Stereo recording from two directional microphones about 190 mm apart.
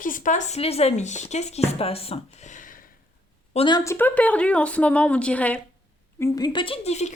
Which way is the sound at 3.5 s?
25° left (ahead or behind).